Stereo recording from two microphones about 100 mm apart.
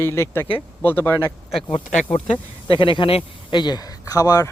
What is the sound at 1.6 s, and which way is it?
A man's voice, 65° left (ahead or behind).